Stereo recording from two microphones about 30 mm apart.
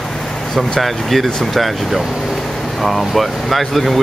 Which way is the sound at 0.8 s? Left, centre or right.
Centre.